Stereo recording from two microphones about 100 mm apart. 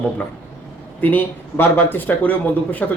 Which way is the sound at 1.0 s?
20° left (ahead or behind).